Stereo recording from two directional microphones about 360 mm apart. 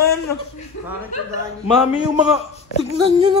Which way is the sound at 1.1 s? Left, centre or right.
Centre.